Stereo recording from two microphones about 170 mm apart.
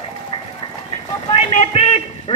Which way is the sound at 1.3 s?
40° left (ahead or behind).